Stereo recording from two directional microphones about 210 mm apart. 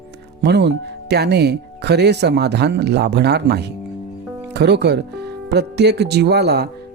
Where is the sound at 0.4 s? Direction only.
55° right (ahead or behind).